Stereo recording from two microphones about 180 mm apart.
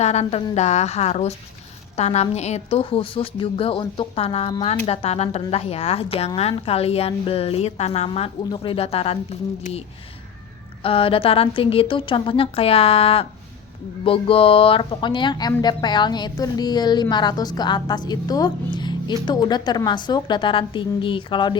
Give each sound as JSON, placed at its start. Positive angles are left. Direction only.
{"t": 0.0, "sound": "a woman's voice", "side_deg": 35}
{"t": 10.8, "sound": "a woman's voice", "side_deg": 30}